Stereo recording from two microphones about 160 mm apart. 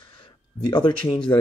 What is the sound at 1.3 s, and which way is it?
Speech, 15° left (ahead or behind).